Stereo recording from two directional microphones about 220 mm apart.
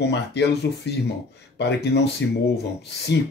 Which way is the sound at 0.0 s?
50° left (ahead or behind).